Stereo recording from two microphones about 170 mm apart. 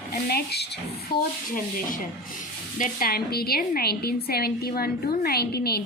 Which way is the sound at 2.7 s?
55° left (ahead or behind).